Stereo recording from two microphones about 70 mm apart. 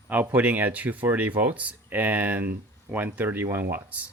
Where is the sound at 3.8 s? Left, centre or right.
Right.